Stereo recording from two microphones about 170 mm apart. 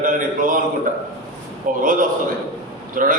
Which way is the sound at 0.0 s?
50° right (ahead or behind).